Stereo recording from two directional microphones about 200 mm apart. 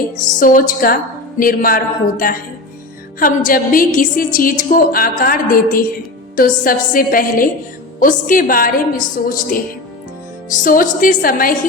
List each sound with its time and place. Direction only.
0.3 s a woman's voice: 40° left (ahead or behind)
10.6 s a woman's voice: 40° left (ahead or behind)